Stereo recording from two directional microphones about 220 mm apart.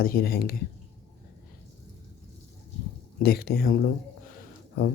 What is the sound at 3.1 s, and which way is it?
Speech, 45° left (ahead or behind).